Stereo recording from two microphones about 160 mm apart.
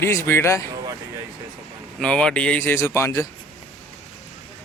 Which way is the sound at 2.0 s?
5° left (ahead or behind).